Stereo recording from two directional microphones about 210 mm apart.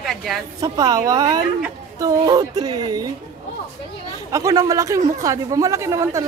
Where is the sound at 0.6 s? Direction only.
15° right (ahead or behind).